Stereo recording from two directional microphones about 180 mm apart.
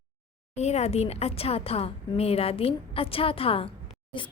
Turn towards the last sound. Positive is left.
turn(degrees=30)  # may be behind; listen again after turning